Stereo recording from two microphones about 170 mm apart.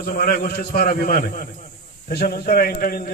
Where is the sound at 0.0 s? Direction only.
65° left (ahead or behind).